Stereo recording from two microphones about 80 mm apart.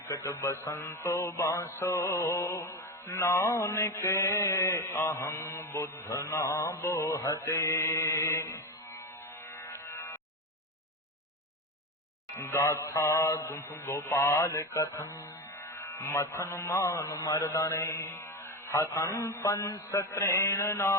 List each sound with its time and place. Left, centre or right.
0.1 s music: left
12.4 s music: left